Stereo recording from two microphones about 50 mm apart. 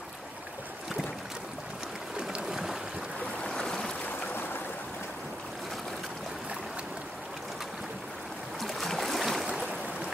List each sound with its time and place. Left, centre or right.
2.2 s boat: centre
3.4 s a sound: centre
8.5 s boat: centre
9.7 s stream: right